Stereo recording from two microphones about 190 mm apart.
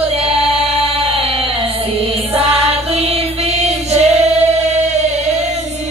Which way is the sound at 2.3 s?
30° right (ahead or behind).